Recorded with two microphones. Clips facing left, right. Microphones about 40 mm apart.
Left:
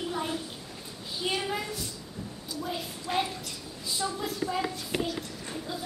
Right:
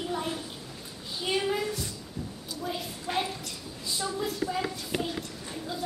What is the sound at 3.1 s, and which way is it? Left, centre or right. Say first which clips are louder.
A woman's voice: left 1 dB; centre.